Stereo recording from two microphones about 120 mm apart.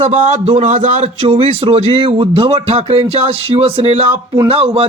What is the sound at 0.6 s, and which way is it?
Speech, 80° right.